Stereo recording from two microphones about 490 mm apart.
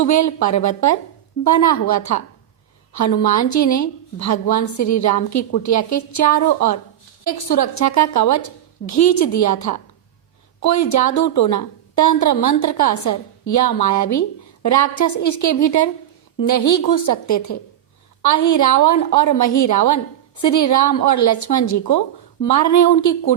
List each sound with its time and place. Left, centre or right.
0.0 s a woman's voice: left